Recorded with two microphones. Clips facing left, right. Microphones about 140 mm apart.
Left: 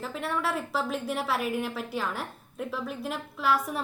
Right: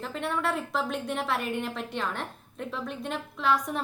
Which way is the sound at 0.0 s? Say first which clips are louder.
Right 1 dB; centre (ahead or behind).